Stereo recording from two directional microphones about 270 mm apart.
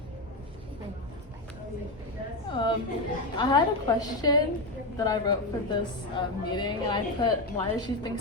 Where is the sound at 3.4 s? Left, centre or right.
Centre.